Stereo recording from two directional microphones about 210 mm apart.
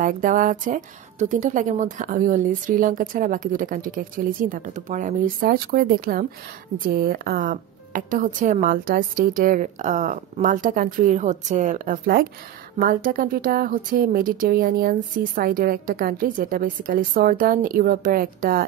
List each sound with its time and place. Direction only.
0.0 s speech: 40° right (ahead or behind)